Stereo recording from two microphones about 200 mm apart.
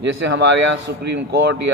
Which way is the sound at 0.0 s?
65° right (ahead or behind).